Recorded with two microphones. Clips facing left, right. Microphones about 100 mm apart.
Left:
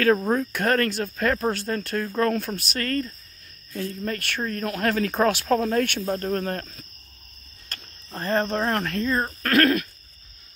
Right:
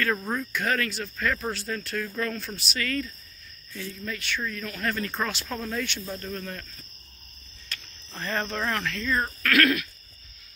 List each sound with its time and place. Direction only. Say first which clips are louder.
0.0 s speech: left 8 dB; 65° left (ahead or behind)
7.7 s speech: left 4 dB; 35° left (ahead or behind)